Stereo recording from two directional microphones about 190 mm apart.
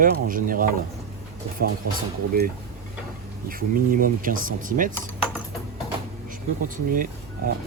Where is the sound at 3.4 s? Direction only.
50° right (ahead or behind).